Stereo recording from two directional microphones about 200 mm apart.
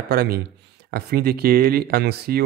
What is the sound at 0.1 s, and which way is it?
A man's voice, 50° right (ahead or behind).